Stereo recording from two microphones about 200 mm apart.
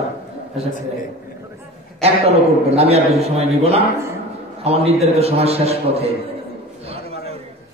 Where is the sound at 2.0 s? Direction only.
30° right (ahead or behind).